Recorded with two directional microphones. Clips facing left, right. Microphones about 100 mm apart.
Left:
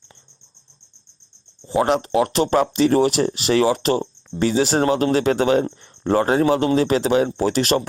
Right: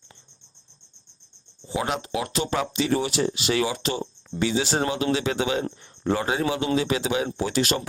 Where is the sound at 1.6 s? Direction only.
50° left (ahead or behind).